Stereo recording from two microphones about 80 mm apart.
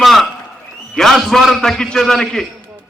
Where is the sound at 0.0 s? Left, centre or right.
Centre.